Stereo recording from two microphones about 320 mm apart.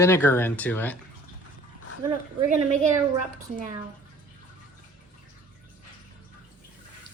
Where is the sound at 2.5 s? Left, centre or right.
Right.